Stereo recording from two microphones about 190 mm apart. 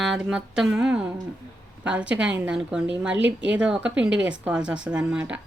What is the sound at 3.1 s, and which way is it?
Speech, 70° right (ahead or behind).